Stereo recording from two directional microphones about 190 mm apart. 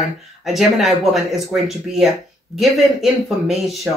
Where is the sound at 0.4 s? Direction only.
Centre (ahead or behind).